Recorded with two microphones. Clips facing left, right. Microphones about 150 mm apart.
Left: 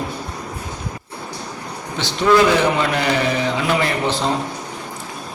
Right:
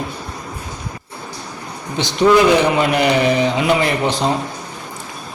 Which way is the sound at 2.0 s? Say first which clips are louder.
Right 2 dB; 15° right (ahead or behind).